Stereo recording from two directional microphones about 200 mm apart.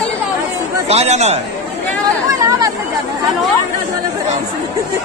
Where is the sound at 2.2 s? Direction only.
15° right (ahead or behind).